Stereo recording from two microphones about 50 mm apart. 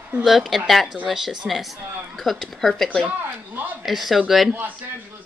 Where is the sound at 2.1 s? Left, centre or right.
Centre.